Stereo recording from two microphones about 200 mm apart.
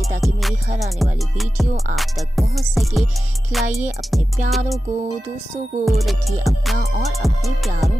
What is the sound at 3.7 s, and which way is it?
Music, 35° right (ahead or behind).